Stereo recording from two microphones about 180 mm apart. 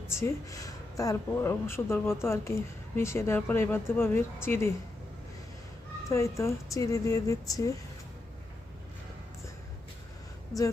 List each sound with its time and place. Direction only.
0.1 s speech: 15° left (ahead or behind)
6.1 s speech: 15° left (ahead or behind)